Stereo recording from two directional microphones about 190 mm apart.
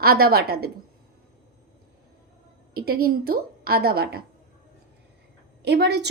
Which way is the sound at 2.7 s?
50° right (ahead or behind).